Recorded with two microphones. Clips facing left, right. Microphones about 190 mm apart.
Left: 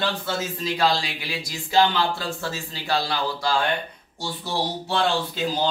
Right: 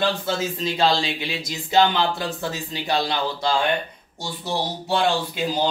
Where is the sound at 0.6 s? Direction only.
25° right (ahead or behind).